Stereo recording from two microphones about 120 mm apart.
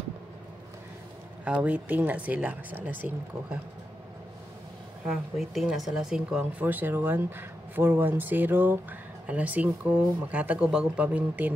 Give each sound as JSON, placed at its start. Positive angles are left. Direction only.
{"t": 1.4, "sound": "speech", "side_deg": -10}
{"t": 5.0, "sound": "speech", "side_deg": -5}
{"t": 6.6, "sound": "speech", "side_deg": -15}